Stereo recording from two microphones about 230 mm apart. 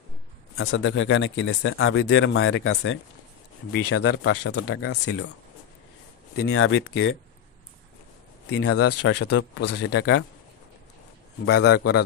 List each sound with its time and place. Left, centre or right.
0.6 s speech: left
3.9 s speech: left
4.2 s speech: left
4.6 s speech: left
6.4 s speech: left
8.6 s speech: left
9.3 s speech: left
11.4 s speech: left